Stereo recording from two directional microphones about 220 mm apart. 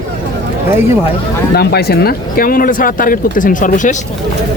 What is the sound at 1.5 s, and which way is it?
Speech, 45° left (ahead or behind).